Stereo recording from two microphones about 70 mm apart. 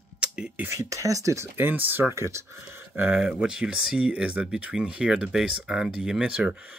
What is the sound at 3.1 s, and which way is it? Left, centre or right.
Speech, centre.